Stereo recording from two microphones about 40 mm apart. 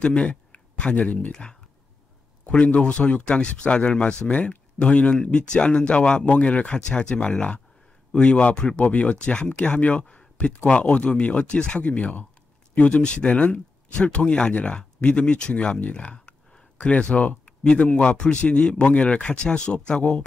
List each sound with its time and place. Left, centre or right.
0.0 s a sound: left
0.9 s speech: left
1.3 s speech: centre
2.6 s speech: left